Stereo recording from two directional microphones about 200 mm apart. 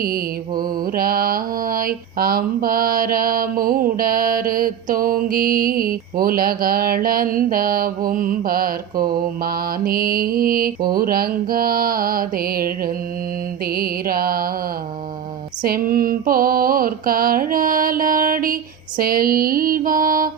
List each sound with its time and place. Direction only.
0.0 s mantra: 45° right (ahead or behind)
15.6 s mantra: 45° right (ahead or behind)